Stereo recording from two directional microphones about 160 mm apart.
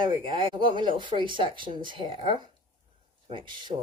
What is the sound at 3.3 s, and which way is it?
Speech, 30° right (ahead or behind).